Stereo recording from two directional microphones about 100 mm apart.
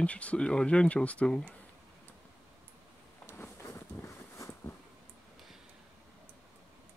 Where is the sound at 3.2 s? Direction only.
25° left (ahead or behind).